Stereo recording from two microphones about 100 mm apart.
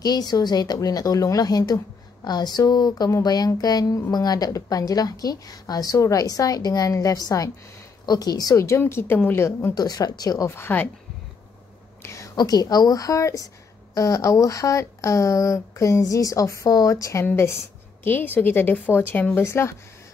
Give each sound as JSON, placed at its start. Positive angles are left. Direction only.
{"t": 0.0, "sound": "a woman's voice", "side_deg": 40}
{"t": 9.8, "sound": "a woman's voice", "side_deg": 40}
{"t": 10.5, "sound": "a woman's voice", "side_deg": 20}
{"t": 12.0, "sound": "a sound", "side_deg": 30}
{"t": 12.4, "sound": "a woman's voice", "side_deg": 40}